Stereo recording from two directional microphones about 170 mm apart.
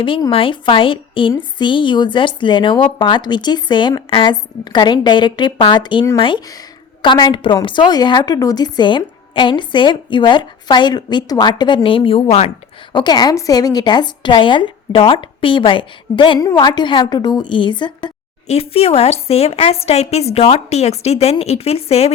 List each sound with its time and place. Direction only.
0.0 s a woman's voice: 30° left (ahead or behind)